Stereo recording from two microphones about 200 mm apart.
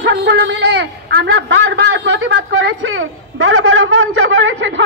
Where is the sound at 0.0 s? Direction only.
60° right (ahead or behind).